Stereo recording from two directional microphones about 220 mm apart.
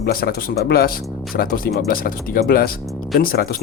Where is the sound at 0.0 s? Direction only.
45° left (ahead or behind).